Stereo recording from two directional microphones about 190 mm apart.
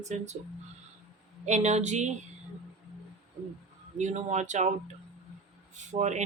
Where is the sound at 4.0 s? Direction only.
40° right (ahead or behind).